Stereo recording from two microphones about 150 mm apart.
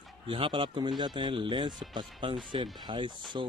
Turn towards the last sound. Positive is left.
turn(degrees=-35)  # may be behind; listen again after turning